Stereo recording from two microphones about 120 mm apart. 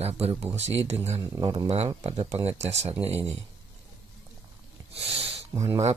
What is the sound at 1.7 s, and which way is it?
Speech, 55° right (ahead or behind).